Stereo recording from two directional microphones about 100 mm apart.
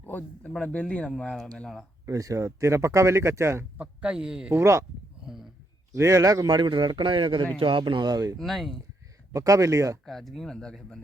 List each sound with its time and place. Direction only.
0.0 s speech: 15° left (ahead or behind)
2.0 s speech: 35° right (ahead or behind)
3.8 s a man's voice: 10° right (ahead or behind)
4.5 s speech: 25° right (ahead or behind)
5.2 s a sound: 5° right (ahead or behind)
5.9 s speech: 30° right (ahead or behind)
8.4 s speech: centre (ahead or behind)
9.3 s speech: 35° right (ahead or behind)
10.1 s speech: centre (ahead or behind)